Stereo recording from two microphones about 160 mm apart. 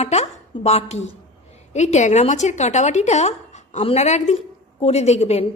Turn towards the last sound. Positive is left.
turn(degrees=45)  # may be behind; listen again after turning